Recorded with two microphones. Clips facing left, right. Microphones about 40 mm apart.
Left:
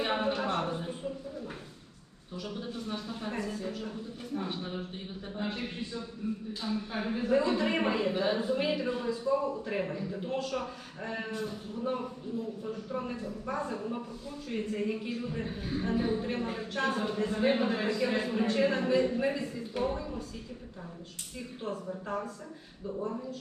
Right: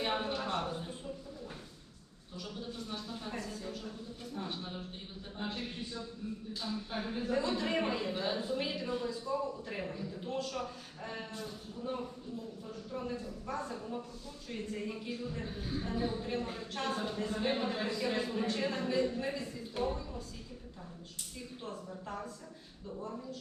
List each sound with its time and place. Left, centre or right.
0.0 s a sound: left
2.4 s a woman's voice: left
5.5 s a man's voice: left
10.2 s a woman's voice: left
11.3 s a man's voice: left
17.1 s a man's voice: centre
17.4 s a man's voice: left
18.5 s a woman's voice: left